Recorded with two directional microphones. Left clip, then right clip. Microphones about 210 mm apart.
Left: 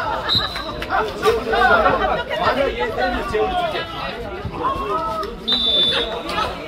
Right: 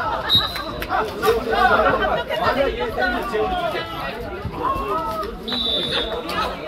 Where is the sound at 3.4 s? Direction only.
25° left (ahead or behind).